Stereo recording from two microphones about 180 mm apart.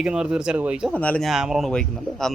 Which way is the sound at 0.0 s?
5° right (ahead or behind).